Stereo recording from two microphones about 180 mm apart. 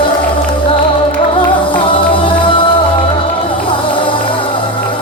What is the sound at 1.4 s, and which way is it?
Music, 25° left (ahead or behind).